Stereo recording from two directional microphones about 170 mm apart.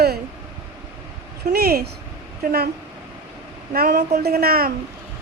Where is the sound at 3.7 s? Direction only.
65° right (ahead or behind).